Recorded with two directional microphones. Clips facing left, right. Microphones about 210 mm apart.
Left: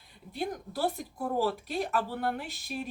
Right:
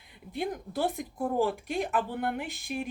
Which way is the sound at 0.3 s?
20° right (ahead or behind).